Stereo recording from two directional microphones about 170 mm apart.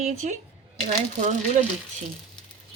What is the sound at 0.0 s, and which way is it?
Speech, 45° right (ahead or behind).